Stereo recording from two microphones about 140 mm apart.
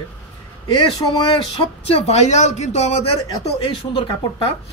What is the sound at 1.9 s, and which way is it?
Speech, 45° left (ahead or behind).